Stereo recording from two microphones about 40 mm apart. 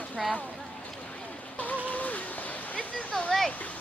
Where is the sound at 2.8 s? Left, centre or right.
Left.